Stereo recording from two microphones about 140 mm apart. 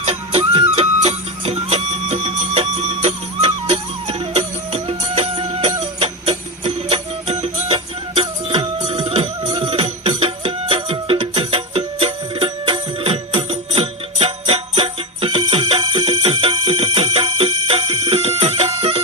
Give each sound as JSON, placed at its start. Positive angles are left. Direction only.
{"t": 0.0, "sound": "music", "side_deg": -45}